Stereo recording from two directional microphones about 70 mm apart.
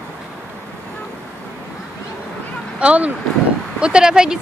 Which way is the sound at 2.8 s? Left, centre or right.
Centre.